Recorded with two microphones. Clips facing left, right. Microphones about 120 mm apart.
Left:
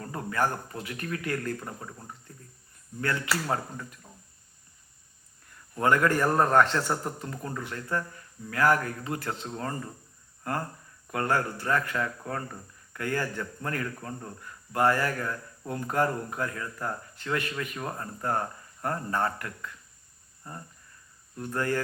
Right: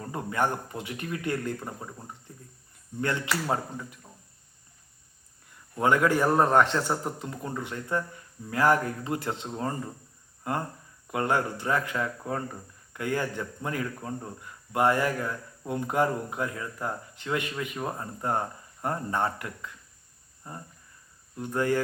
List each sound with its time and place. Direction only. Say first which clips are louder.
0.0 s a man's voice: right 1 dB; 20° right (ahead or behind)
5.7 s speech: right 1 dB; 10° right (ahead or behind)